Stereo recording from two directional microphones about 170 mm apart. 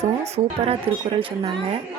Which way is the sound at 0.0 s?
35° right (ahead or behind).